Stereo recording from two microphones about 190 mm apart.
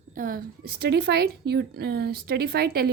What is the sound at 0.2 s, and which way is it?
A woman's voice, 50° right (ahead or behind).